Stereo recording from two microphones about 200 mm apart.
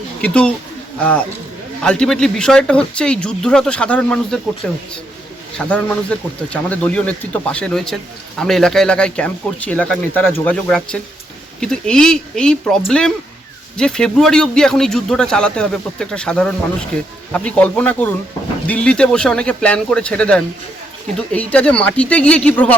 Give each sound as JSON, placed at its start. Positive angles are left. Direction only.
{"t": 0.2, "sound": "speech", "side_deg": 5}
{"t": 1.8, "sound": "speech", "side_deg": 5}